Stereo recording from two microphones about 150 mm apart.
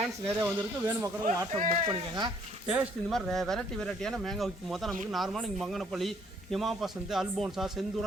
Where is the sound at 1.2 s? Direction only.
65° right (ahead or behind).